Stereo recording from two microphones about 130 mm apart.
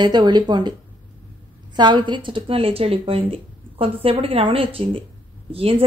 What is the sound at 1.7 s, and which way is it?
A woman's voice, 35° right (ahead or behind).